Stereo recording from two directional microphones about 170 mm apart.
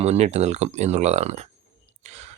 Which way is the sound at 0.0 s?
40° right (ahead or behind).